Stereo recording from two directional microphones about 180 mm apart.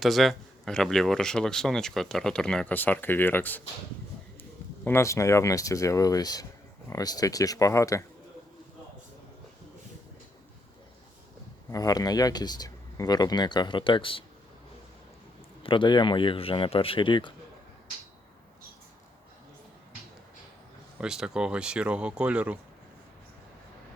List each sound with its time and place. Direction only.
0.0 s speech: centre (ahead or behind)
4.9 s speech: 15° left (ahead or behind)
11.7 s speech: 20° left (ahead or behind)
15.6 s speech: 25° left (ahead or behind)
21.0 s speech: 5° right (ahead or behind)